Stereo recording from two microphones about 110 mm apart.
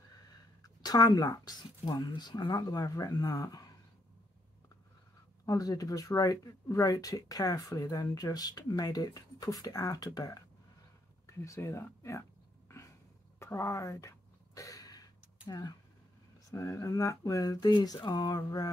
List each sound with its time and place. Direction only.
0.8 s speech: 35° left (ahead or behind)
5.4 s speech: 35° left (ahead or behind)
13.4 s a sound: 25° left (ahead or behind)
16.5 s speech: 30° left (ahead or behind)